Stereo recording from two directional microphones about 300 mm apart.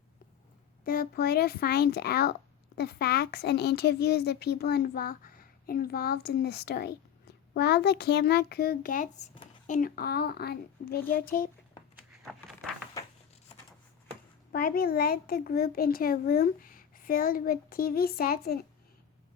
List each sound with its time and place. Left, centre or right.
0.9 s a woman's voice: left
13.0 s a sound: centre
14.5 s a child's voice: left